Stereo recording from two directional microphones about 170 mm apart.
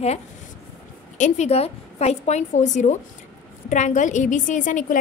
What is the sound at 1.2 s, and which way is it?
A woman's voice, 40° left (ahead or behind).